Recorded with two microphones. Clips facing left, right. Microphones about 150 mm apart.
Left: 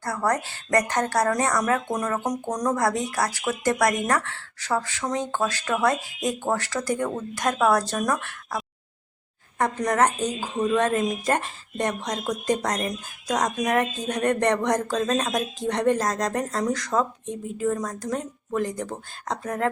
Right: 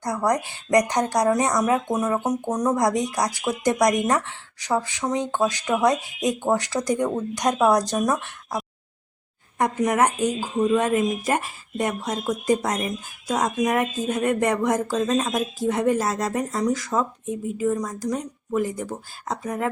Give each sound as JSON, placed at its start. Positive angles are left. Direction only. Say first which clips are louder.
{"t": 0.0, "sound": "a woman's voice", "louder": "right 2 dB", "side_deg": -15}
{"t": 9.6, "sound": "a woman's voice", "louder": "right 1 dB", "side_deg": -10}